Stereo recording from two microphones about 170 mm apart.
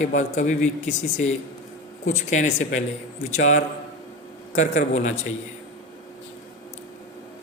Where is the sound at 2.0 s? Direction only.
45° left (ahead or behind).